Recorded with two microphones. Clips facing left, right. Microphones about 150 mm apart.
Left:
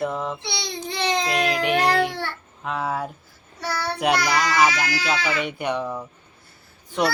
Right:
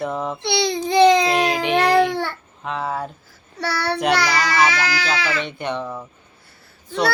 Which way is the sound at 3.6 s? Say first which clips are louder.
Right 4 dB; 75° right (ahead or behind).